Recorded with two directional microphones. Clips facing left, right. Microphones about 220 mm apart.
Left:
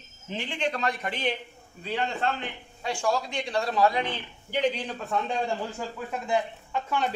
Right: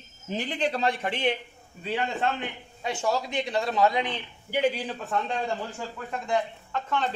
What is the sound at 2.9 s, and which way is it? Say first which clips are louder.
A man's voice: even; 20° right (ahead or behind).